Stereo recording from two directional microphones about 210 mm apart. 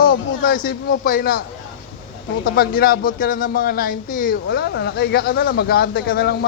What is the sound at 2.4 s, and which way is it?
Speech, 45° left (ahead or behind).